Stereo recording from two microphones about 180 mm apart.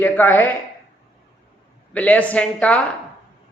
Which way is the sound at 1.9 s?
5° left (ahead or behind).